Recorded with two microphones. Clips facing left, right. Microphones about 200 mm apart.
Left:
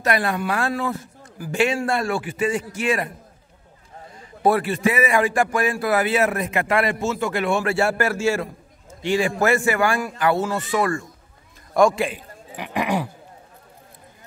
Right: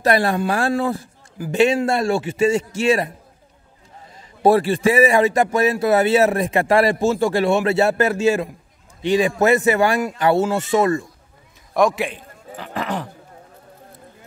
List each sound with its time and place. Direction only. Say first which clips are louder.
0.0 s a man's voice: right 4 dB; 30° right (ahead or behind)
4.4 s a man's voice: right 4 dB; 30° right (ahead or behind)
11.7 s a man's voice: left 1 dB; centre (ahead or behind)
12.5 s speech: left 2 dB; 15° left (ahead or behind)